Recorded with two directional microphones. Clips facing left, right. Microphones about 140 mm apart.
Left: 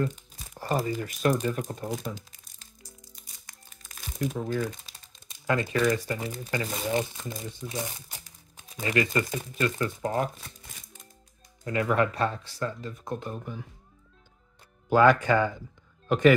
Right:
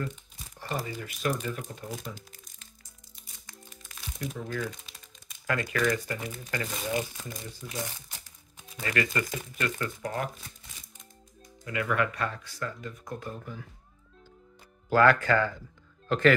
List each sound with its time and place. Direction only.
0.6 s speech: 40° left (ahead or behind)
4.2 s speech: 45° left (ahead or behind)
4.5 s speech: 35° left (ahead or behind)
11.6 s speech: 35° left (ahead or behind); by 13.7 s 15° left (ahead or behind)
14.9 s speech: 15° left (ahead or behind)